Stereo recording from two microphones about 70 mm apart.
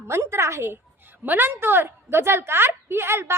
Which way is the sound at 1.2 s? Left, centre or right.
Right.